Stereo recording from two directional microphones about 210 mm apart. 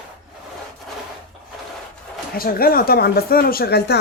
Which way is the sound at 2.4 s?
45° left (ahead or behind).